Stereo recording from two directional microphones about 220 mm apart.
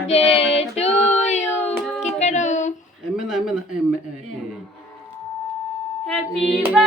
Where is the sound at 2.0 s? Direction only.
30° left (ahead or behind).